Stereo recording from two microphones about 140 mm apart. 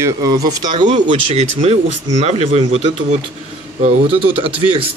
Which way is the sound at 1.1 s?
45° right (ahead or behind).